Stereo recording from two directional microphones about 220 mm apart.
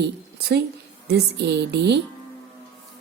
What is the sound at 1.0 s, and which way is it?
Speech, 50° right (ahead or behind).